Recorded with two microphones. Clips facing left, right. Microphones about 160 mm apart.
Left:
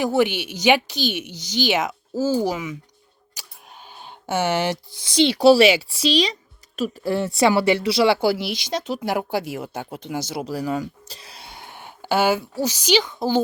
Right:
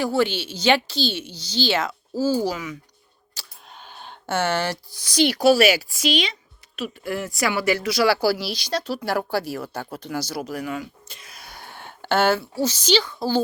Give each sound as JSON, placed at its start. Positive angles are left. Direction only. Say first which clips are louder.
{"t": 0.0, "sound": "speech", "louder": "left 2 dB", "side_deg": 15}
{"t": 3.3, "sound": "speech", "louder": "even", "side_deg": 10}